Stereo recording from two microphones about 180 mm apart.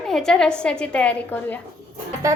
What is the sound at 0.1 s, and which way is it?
A woman's voice, 5° left (ahead or behind).